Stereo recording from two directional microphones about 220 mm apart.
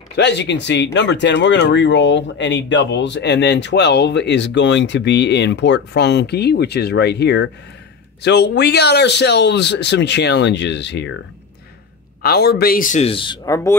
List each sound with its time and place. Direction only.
0.1 s speech: 50° left (ahead or behind)
12.2 s speech: 45° left (ahead or behind); by 13.6 s 20° left (ahead or behind)